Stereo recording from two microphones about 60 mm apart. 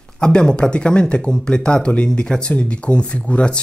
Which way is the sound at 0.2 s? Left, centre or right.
Centre.